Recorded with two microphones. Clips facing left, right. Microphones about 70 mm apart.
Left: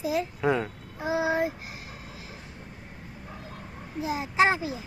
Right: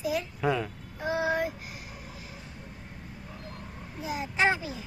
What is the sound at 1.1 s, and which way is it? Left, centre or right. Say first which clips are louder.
Child singing: left 2 dB; centre.